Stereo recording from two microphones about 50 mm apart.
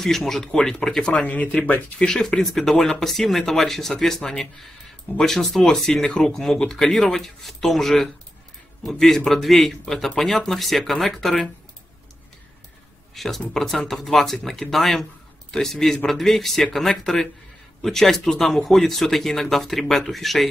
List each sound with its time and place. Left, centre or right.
0.0 s speech: centre
1.0 s speech: left
2.0 s speech: centre
13.1 s speech: centre